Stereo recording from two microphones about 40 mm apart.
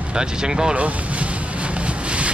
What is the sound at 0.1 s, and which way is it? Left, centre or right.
Speech, centre.